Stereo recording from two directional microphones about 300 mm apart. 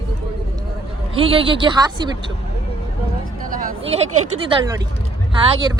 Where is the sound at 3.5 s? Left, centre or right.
Right.